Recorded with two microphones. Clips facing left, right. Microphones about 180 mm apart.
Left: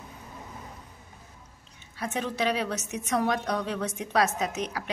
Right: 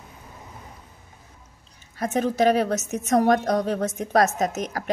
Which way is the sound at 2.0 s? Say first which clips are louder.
Right 8 dB; 45° right (ahead or behind).